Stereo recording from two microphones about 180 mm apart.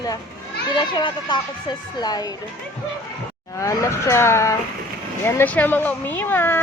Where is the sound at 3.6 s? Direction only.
15° left (ahead or behind).